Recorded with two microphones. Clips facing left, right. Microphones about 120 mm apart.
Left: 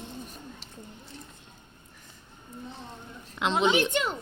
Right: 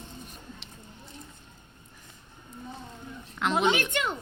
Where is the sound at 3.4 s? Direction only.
25° left (ahead or behind).